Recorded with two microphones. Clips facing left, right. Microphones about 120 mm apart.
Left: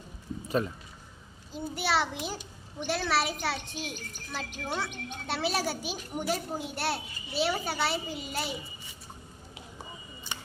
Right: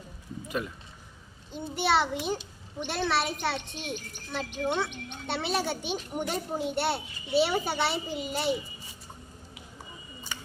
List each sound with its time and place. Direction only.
0.4 s speech: 35° left (ahead or behind)
1.7 s a child's voice: centre (ahead or behind)